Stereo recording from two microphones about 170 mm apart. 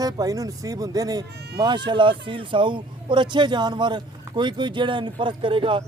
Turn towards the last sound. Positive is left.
turn(degrees=-30)  # may be behind; listen again after turning